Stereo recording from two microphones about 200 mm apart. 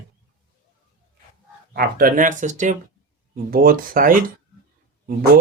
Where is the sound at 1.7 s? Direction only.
45° right (ahead or behind).